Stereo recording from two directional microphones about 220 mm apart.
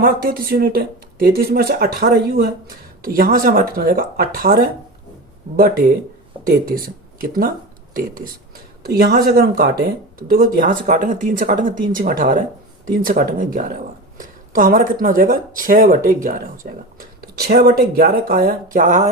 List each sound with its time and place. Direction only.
0.0 s speech: 40° right (ahead or behind)
8.8 s speech: 45° right (ahead or behind)